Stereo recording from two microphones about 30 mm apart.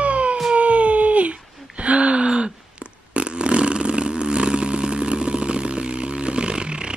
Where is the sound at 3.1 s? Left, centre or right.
Right.